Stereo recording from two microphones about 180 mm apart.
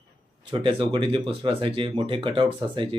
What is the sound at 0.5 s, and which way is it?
Speech, 30° right (ahead or behind).